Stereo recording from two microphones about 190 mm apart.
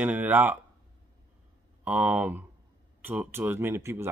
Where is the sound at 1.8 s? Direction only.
10° right (ahead or behind).